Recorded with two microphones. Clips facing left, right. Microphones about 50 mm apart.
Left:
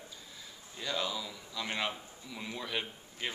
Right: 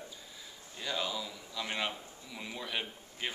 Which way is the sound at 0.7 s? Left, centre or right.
Centre.